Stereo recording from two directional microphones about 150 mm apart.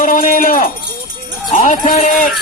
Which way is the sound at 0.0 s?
60° left (ahead or behind).